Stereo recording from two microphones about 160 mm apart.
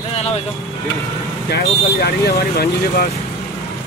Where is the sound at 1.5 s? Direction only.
80° left.